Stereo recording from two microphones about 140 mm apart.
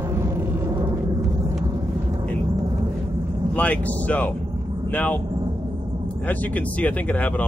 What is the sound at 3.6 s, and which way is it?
Speech, 10° left (ahead or behind).